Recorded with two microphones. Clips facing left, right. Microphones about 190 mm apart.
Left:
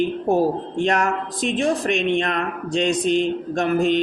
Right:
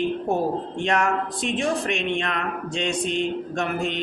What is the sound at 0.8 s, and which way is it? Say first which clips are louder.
Speech: left 1 dB; 40° left (ahead or behind).